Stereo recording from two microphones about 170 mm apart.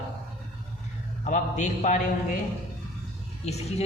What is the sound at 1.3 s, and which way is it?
A man's voice, 45° left (ahead or behind).